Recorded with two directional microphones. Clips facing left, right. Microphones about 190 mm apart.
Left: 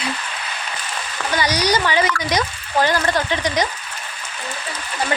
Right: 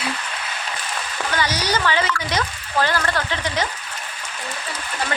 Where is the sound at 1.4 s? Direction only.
15° left (ahead or behind).